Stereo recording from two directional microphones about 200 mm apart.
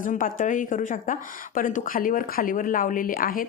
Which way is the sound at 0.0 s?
40° left (ahead or behind).